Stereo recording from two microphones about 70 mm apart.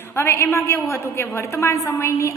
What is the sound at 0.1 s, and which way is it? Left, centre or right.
A woman's voice, left.